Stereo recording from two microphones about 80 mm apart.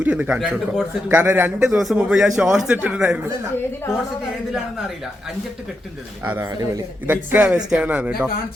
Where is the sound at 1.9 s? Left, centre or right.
Centre.